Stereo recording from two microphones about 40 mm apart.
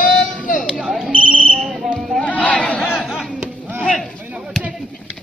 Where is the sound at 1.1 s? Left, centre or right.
Right.